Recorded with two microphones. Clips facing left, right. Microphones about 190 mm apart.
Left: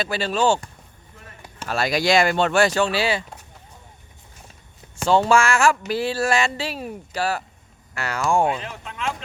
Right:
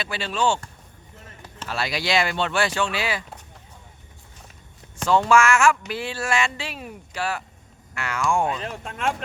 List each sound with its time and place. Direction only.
0.0 s speech: 40° left (ahead or behind)
1.6 s speech: 45° left (ahead or behind); by 3.2 s 30° left (ahead or behind)
5.0 s speech: 30° left (ahead or behind)
8.6 s speech: 45° right (ahead or behind)